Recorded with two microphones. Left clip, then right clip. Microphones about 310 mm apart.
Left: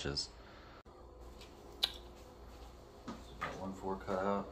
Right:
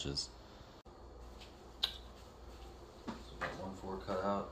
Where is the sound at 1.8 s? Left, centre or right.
Left.